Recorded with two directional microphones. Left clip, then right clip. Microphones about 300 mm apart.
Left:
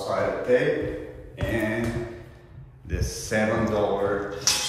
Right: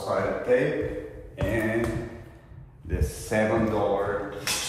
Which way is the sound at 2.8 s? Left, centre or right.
Centre.